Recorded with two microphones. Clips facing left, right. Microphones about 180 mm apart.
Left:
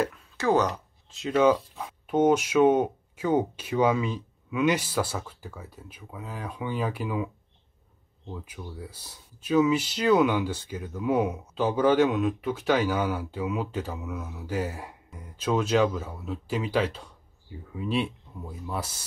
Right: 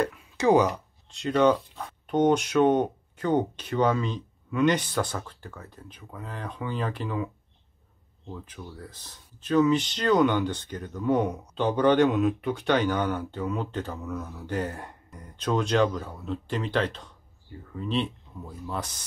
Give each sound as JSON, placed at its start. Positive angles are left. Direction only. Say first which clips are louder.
{"t": 0.4, "sound": "speech", "louder": "right 3 dB", "side_deg": -20}
{"t": 0.7, "sound": "speech", "louder": "right 2 dB", "side_deg": 0}
{"t": 8.3, "sound": "speech", "louder": "left 1 dB", "side_deg": 5}